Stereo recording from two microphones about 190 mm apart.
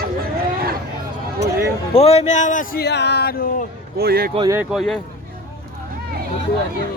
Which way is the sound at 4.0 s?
55° right (ahead or behind).